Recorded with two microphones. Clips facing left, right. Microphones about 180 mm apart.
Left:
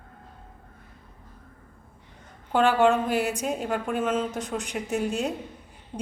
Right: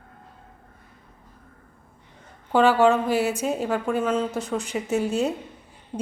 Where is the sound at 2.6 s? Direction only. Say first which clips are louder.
Right 3 dB; centre (ahead or behind).